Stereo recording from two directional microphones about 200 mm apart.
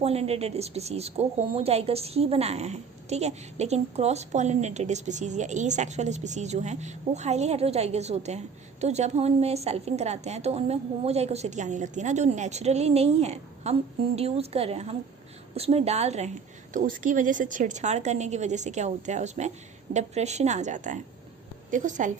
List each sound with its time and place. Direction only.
0.0 s a woman's voice: 30° right (ahead or behind)